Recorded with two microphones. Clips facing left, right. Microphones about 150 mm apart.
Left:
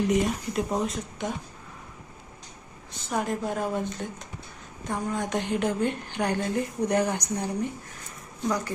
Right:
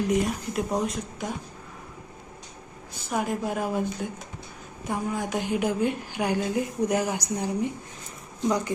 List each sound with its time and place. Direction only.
0.1 s speech: centre (ahead or behind)
3.1 s a woman's voice: 5° right (ahead or behind); by 8.7 s 20° right (ahead or behind)